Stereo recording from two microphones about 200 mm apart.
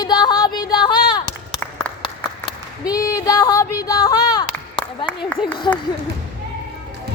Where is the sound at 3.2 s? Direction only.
20° left (ahead or behind).